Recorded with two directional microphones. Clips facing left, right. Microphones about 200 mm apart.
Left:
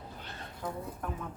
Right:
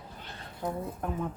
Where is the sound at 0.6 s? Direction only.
25° right (ahead or behind).